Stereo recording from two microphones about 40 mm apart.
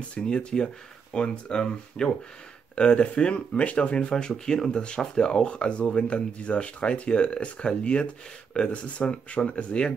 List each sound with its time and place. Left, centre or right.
0.1 s speech: left